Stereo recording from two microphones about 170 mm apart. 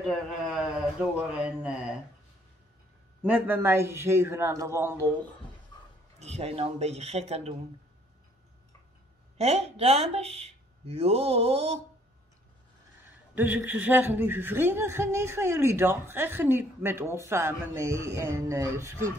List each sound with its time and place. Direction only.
0.0 s a sound: centre (ahead or behind)
1.3 s speech: 5° right (ahead or behind)
3.2 s speech: 10° right (ahead or behind)
6.1 s speech: 40° right (ahead or behind)
9.4 s speech: 35° right (ahead or behind)
13.3 s speech: 10° right (ahead or behind)